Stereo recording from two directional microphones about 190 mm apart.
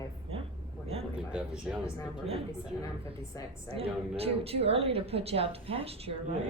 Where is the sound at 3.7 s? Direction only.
30° right (ahead or behind).